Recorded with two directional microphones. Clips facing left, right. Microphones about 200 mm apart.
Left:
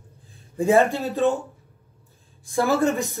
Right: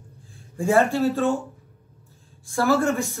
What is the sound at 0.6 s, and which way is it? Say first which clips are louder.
Speech: left 1 dB; 20° left (ahead or behind).